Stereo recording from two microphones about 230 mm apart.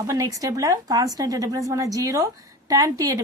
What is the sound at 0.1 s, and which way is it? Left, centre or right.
Speech, centre.